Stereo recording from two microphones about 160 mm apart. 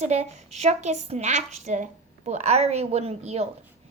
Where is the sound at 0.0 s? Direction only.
45° right (ahead or behind).